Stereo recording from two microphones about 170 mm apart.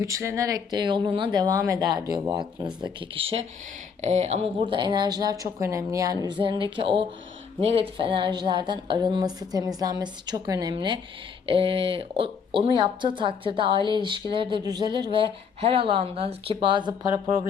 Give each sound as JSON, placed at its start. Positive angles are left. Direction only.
{"t": 0.0, "sound": "speech", "side_deg": -15}
{"t": 4.7, "sound": "speech", "side_deg": -25}